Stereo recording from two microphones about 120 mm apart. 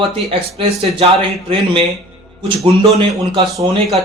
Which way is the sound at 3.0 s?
50° right (ahead or behind).